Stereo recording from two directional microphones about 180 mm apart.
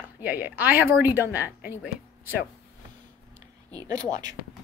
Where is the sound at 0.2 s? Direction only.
10° right (ahead or behind).